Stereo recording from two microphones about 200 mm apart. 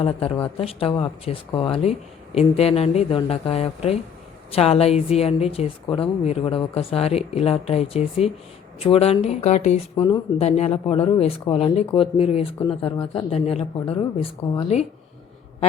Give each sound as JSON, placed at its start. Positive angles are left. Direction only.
{"t": 0.0, "sound": "a woman's voice", "side_deg": 30}